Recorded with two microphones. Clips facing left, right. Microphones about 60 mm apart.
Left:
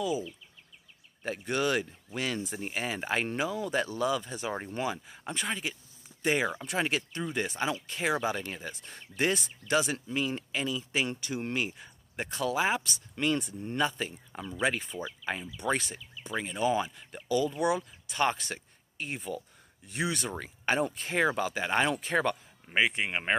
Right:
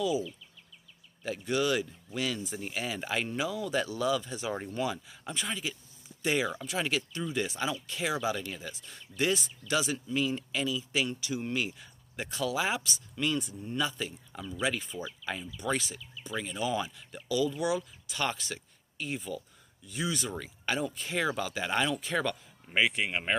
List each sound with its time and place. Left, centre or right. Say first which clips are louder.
0.0 s speech: right 1 dB; left
13.1 s speech: left 2 dB; left
16.3 s speech: left 3 dB; left